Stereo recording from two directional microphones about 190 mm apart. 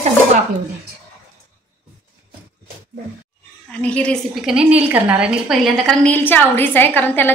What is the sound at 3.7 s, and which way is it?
A woman's voice, 5° left (ahead or behind).